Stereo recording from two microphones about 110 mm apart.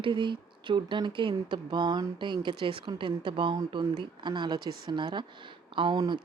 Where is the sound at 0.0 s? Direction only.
45° right (ahead or behind).